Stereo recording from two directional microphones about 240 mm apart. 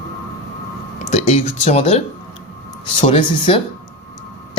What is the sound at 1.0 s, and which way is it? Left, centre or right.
Speech, left.